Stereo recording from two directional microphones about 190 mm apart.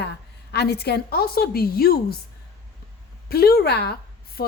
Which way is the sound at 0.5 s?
60° left (ahead or behind).